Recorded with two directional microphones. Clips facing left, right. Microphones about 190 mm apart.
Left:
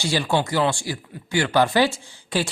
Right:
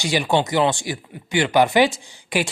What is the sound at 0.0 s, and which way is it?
Speech, 15° right (ahead or behind).